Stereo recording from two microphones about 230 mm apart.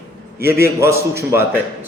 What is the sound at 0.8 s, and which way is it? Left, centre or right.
Speech, centre.